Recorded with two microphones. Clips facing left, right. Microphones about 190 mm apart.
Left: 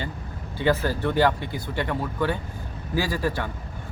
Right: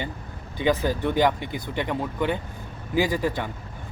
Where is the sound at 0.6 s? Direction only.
15° right (ahead or behind).